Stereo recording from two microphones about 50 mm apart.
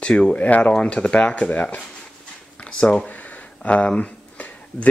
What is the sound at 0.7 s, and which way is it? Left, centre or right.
Speech, centre.